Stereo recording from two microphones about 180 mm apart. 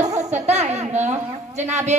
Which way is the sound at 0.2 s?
40° right (ahead or behind).